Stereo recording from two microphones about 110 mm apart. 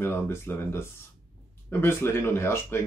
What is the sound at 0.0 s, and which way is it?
Speech, 20° left (ahead or behind).